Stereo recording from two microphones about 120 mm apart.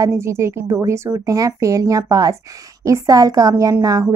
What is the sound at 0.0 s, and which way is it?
A woman's voice, 20° right (ahead or behind).